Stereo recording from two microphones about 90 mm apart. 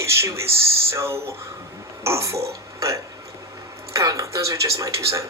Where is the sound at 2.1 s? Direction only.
35° right (ahead or behind).